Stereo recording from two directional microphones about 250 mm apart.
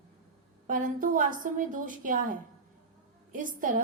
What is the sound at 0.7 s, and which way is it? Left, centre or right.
A woman's voice, right.